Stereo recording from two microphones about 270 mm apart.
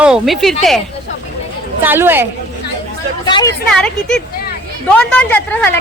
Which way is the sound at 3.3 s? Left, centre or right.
Centre.